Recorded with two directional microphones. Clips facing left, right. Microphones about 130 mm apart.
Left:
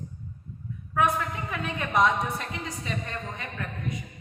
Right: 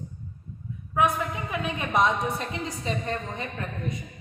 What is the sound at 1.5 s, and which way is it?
A woman's voice, 15° right (ahead or behind).